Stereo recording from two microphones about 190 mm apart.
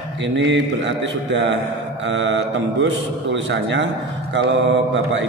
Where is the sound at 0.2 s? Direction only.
70° right (ahead or behind).